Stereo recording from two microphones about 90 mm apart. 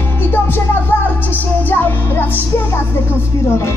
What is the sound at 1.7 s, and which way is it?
Music, 20° left (ahead or behind).